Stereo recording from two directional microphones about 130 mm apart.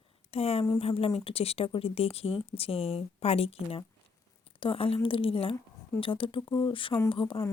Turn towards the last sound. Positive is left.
turn(degrees=40)  # may be behind; listen again after turning